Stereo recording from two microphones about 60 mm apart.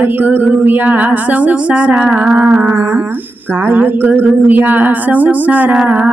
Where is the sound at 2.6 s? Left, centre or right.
Right.